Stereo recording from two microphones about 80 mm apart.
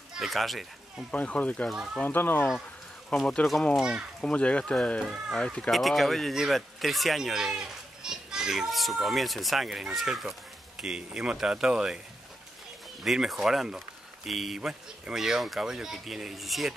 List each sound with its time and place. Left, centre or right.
0.2 s speech: centre
1.1 s speech: centre
3.1 s speech: centre
3.7 s speech: centre
4.2 s speech: centre
5.0 s speech: centre
5.4 s speech: centre
13.0 s speech: centre